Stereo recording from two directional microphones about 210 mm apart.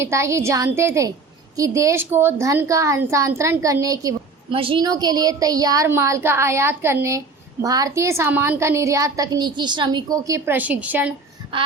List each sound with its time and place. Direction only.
0.0 s a woman's voice: 15° right (ahead or behind)